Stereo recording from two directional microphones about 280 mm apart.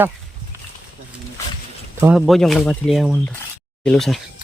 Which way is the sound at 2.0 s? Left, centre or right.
Centre.